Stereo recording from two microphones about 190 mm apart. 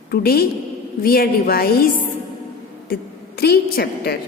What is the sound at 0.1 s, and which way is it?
A woman's voice, 55° left (ahead or behind).